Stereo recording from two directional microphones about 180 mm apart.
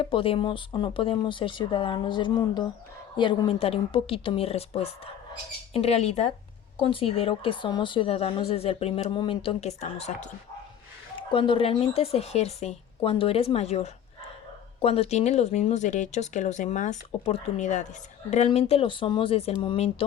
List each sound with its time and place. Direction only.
0.0 s a woman's voice: 30° left (ahead or behind)
11.3 s a woman's voice: 30° left (ahead or behind)